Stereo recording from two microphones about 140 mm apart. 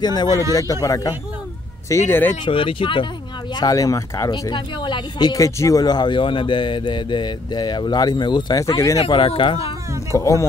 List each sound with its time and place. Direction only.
0.0 s speech: 30° left (ahead or behind)
2.4 s speech: 40° left (ahead or behind)
3.5 s speech: 25° left (ahead or behind)
8.9 s speech: 45° left (ahead or behind)
10.1 s speech: 20° left (ahead or behind)